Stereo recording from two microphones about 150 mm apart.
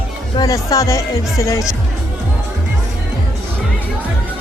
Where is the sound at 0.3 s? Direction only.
25° left (ahead or behind).